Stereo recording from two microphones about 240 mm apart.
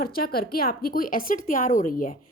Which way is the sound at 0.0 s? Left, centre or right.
Left.